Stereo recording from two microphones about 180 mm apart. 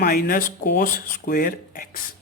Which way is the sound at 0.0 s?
55° left (ahead or behind).